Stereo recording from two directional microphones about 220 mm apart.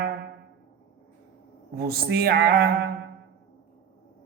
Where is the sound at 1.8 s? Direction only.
45° right (ahead or behind).